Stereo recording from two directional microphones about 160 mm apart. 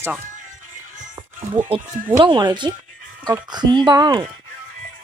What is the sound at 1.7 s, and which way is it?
Speech, 35° right (ahead or behind).